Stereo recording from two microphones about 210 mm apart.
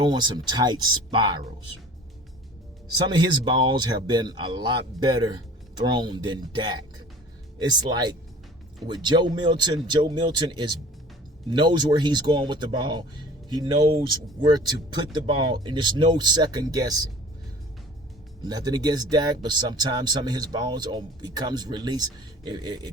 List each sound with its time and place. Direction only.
0.0 s speech: 20° right (ahead or behind)
3.1 s speech: 20° right (ahead or behind)
18.4 s speech: 20° right (ahead or behind)